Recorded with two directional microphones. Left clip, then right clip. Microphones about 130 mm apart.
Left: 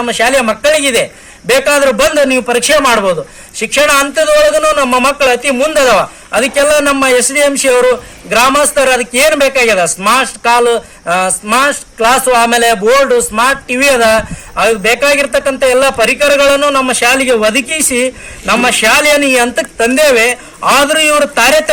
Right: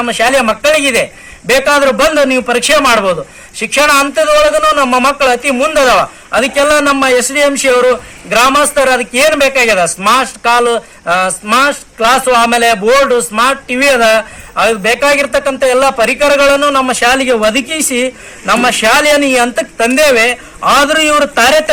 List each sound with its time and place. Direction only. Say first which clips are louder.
0.0 s a man's voice: even; 25° left (ahead or behind)
13.1 s a man's voice: even; 30° left (ahead or behind)